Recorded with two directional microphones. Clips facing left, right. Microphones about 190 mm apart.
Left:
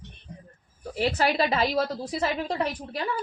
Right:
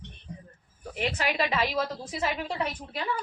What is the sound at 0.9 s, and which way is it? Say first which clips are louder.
Speech: left 5 dB; 35° left (ahead or behind).